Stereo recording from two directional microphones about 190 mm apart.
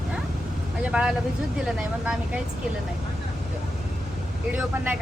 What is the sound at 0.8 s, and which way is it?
Speech, 5° right (ahead or behind).